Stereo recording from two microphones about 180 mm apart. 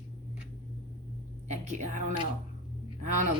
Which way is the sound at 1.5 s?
40° right (ahead or behind).